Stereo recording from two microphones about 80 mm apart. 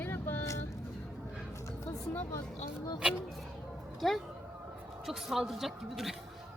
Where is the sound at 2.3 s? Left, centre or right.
Left.